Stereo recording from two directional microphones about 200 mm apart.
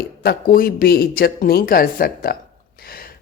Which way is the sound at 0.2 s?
50° left (ahead or behind).